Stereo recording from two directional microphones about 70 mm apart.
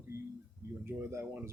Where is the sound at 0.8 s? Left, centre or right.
Right.